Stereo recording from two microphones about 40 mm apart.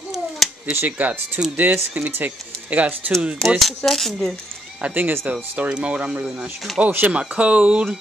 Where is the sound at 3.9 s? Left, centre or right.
Centre.